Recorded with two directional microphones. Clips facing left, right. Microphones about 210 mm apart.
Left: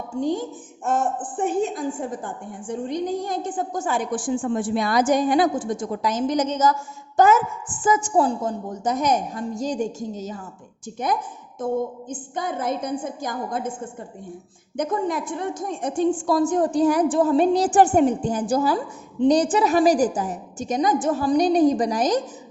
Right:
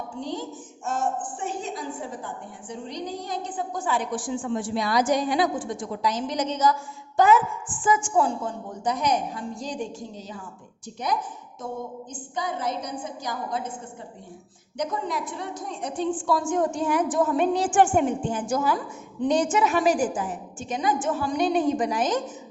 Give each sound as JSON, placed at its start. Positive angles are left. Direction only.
{"t": 0.2, "sound": "a woman's voice", "side_deg": 50}
{"t": 14.8, "sound": "a woman's voice", "side_deg": 50}